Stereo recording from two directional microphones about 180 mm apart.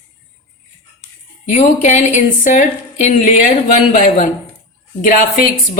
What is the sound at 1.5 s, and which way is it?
A woman's voice, 40° left (ahead or behind).